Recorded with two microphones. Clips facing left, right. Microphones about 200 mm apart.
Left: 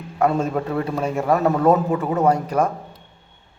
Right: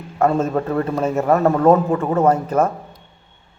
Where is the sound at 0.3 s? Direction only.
5° left (ahead or behind).